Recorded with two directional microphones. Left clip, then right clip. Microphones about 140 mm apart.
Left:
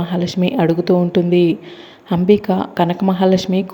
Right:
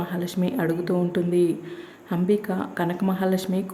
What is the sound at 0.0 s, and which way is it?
Speech, 25° left (ahead or behind).